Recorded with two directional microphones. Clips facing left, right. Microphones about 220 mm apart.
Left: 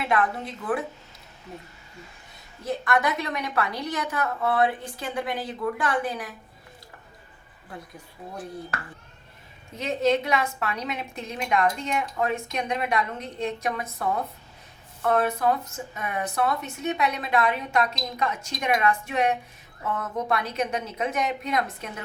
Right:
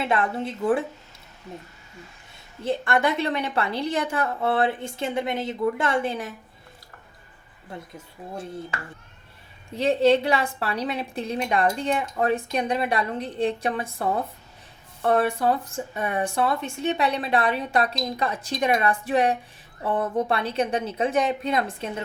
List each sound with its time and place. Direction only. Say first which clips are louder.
0.0 s a woman's voice: right 1 dB; 25° right (ahead or behind)
2.6 s a woman's voice: right 2 dB; 30° right (ahead or behind)
7.7 s a woman's voice: right 3 dB; 25° right (ahead or behind)